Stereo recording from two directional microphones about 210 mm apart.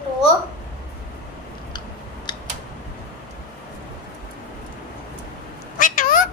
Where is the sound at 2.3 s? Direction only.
20° left (ahead or behind).